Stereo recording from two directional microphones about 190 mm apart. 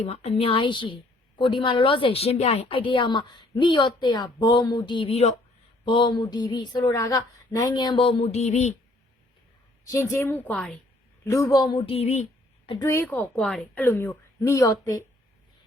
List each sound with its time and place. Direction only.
0.0 s a woman's voice: 35° left (ahead or behind)
9.8 s speech: 15° left (ahead or behind)
11.3 s a woman's voice: 20° left (ahead or behind); by 12.7 s 35° left (ahead or behind)
12.7 s speech: 15° left (ahead or behind)